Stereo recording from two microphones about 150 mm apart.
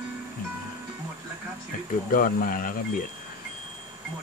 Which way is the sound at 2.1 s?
65° left (ahead or behind).